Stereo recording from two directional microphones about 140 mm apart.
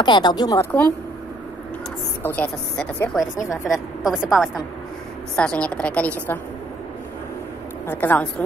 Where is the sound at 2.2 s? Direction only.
10° left (ahead or behind).